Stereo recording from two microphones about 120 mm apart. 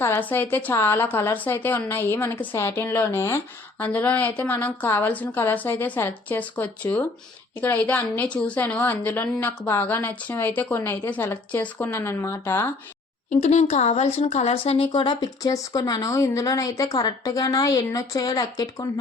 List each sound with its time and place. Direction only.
0.0 s a woman's voice: 20° left (ahead or behind)
13.4 s a woman's voice: 70° left (ahead or behind)
14.5 s speech: 50° left (ahead or behind); by 18.9 s 30° left (ahead or behind)